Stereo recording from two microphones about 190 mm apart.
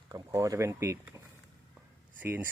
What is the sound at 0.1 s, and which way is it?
Speech, 15° right (ahead or behind).